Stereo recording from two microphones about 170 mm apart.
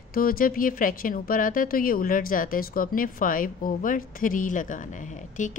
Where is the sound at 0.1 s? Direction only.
60° left (ahead or behind).